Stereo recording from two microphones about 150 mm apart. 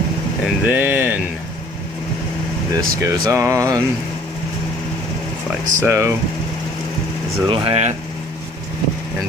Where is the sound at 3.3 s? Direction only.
20° right (ahead or behind).